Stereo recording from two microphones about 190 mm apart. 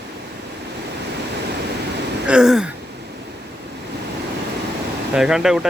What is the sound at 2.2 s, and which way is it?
Speech, 5° right (ahead or behind).